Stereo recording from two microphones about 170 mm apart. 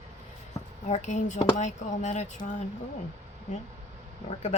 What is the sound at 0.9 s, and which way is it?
Speech, 45° left (ahead or behind).